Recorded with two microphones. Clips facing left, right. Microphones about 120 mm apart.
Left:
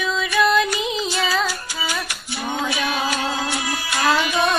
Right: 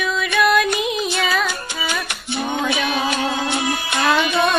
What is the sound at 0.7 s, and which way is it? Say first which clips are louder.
Music: right 2 dB; 60° right (ahead or behind).